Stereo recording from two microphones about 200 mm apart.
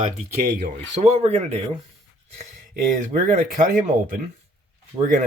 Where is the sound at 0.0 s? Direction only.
50° right (ahead or behind).